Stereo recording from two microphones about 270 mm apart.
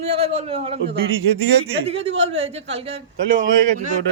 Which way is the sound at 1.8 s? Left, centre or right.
Right.